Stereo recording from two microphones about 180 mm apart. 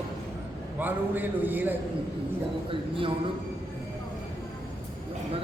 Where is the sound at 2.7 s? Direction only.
30° right (ahead or behind).